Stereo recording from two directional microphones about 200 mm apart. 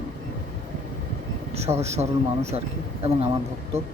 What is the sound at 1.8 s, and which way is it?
Speech, 35° right (ahead or behind).